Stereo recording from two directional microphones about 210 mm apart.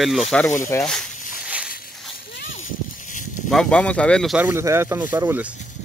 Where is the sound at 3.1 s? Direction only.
40° left (ahead or behind).